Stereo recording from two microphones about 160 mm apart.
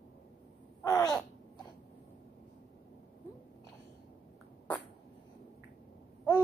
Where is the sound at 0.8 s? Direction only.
25° left (ahead or behind).